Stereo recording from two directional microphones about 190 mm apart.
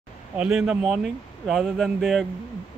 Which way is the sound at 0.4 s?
5° right (ahead or behind).